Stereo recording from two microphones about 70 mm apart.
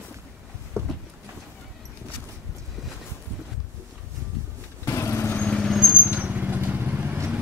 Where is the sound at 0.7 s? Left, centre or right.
Right.